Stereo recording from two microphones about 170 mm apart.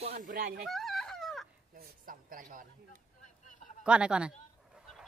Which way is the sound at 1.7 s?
55° right (ahead or behind).